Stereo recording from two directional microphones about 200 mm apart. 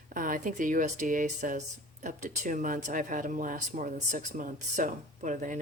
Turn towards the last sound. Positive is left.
turn(degrees=-40)  # may be behind; listen again after turning